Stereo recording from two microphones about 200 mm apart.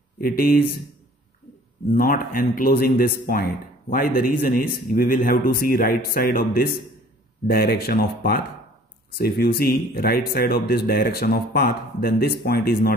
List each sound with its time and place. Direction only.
0.2 s speech: 45° left (ahead or behind)
1.9 s speech: 45° left (ahead or behind)